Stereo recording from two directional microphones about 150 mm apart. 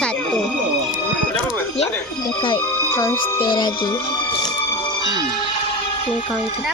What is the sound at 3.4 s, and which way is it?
Speech, 30° left (ahead or behind).